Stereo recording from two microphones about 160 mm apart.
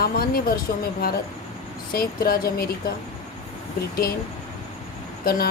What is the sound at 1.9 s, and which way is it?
Speech, 70° left (ahead or behind).